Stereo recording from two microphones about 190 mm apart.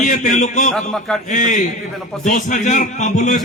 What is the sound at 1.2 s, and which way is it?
A man's voice, 40° left (ahead or behind).